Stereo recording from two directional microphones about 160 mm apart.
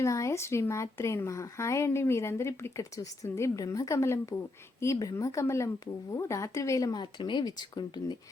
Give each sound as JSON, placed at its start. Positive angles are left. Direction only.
{"t": 0.0, "sound": "speech", "side_deg": 20}